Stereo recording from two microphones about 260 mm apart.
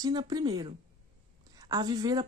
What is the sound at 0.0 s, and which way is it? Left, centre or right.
Speech, centre.